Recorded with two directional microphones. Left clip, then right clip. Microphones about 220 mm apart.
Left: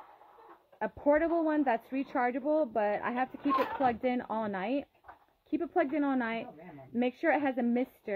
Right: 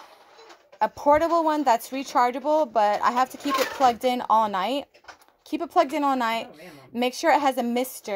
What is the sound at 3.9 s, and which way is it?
Speech, 5° right (ahead or behind).